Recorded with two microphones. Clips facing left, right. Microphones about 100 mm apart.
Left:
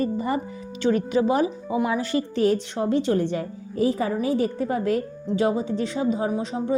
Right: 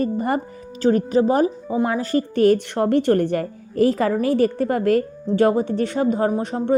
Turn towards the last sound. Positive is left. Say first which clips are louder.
# right 4 dB
turn(degrees=-55)  # may be behind; listen again after turning